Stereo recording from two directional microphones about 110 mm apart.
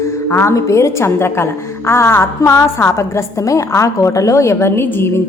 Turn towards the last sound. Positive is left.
turn(degrees=20)  # may be behind; listen again after turning